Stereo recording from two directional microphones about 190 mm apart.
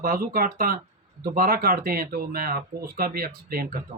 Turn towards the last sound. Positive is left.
turn(degrees=-50)  # may be behind; listen again after turning